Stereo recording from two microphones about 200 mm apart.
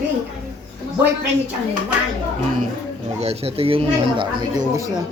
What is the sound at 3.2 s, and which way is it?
Speech, 30° right (ahead or behind).